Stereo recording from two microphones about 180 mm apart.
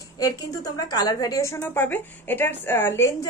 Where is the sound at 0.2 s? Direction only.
20° left (ahead or behind).